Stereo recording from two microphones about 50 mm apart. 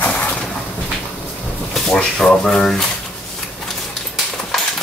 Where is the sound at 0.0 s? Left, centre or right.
Left.